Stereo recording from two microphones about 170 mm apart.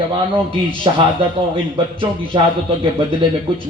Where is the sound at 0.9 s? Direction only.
30° right (ahead or behind).